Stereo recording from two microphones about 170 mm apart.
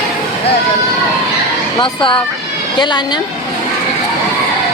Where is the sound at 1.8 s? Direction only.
30° left (ahead or behind).